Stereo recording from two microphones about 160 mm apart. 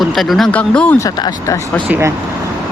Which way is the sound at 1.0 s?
20° left (ahead or behind).